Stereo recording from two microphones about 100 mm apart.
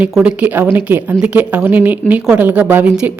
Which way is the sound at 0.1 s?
10° right (ahead or behind).